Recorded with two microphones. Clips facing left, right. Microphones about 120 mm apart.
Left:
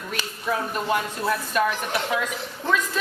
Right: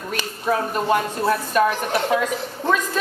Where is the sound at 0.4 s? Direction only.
40° right (ahead or behind).